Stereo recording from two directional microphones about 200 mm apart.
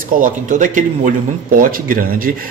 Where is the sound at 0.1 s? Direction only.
40° right (ahead or behind).